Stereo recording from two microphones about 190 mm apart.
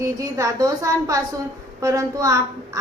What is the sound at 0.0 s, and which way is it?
A woman's voice, 15° right (ahead or behind).